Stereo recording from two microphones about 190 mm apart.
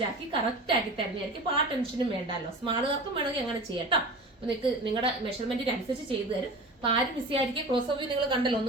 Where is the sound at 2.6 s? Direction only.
25° right (ahead or behind).